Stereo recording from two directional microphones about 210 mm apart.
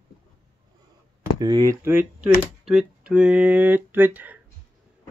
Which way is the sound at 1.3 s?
20° right (ahead or behind).